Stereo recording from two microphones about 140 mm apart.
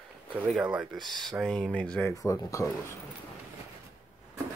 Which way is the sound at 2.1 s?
25° left (ahead or behind).